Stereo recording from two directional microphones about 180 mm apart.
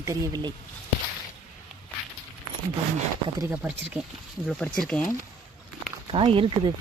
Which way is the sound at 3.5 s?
10° right (ahead or behind).